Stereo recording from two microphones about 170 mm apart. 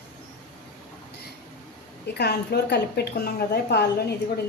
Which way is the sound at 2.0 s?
75° left (ahead or behind).